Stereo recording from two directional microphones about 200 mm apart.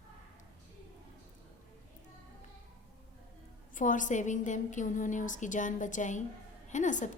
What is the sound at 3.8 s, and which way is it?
A woman's voice, 40° left (ahead or behind).